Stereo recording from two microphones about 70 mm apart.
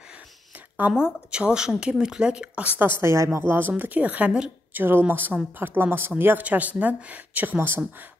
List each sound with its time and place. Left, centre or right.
0.9 s speech: centre
3.0 s a woman's voice: right